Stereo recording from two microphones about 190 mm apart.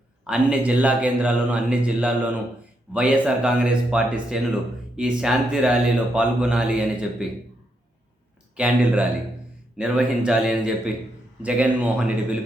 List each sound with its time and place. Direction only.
0.3 s a man's voice: 5° right (ahead or behind)
8.5 s a man's voice: 5° right (ahead or behind)